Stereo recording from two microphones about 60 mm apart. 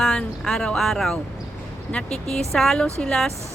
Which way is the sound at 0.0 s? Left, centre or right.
Centre.